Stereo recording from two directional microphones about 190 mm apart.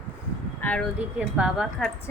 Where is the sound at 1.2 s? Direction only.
5° right (ahead or behind).